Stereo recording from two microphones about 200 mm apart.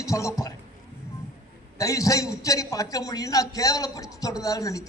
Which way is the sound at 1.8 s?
15° left (ahead or behind).